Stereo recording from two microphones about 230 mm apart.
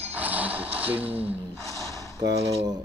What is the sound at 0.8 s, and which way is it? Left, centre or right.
Speech, centre.